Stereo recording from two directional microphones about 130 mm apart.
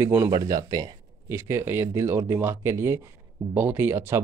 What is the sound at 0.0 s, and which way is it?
Speech, 15° right (ahead or behind).